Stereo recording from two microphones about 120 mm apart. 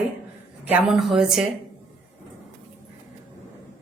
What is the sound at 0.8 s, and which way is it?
Speech, centre (ahead or behind).